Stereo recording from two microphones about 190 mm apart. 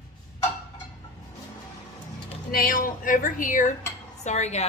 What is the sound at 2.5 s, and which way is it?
A woman's voice, 50° left (ahead or behind).